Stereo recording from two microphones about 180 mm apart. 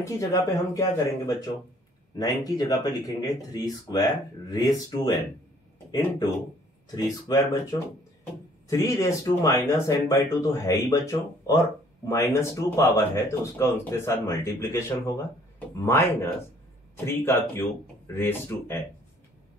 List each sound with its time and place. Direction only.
0.0 s speech: 20° left (ahead or behind)
7.3 s speech: 20° left (ahead or behind)